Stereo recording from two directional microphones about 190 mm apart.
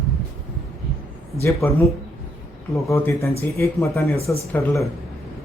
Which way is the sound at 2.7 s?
15° left (ahead or behind).